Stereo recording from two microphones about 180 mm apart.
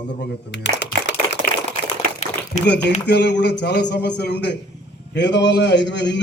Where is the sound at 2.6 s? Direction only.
70° left (ahead or behind).